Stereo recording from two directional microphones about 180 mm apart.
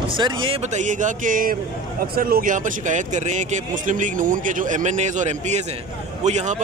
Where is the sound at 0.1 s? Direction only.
30° right (ahead or behind).